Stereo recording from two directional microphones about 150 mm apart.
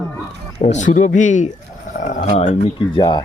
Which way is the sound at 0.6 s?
55° left (ahead or behind).